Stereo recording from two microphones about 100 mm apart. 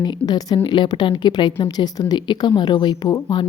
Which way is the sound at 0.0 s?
40° left (ahead or behind).